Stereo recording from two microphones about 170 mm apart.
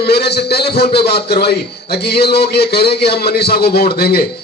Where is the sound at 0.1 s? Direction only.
70° left (ahead or behind).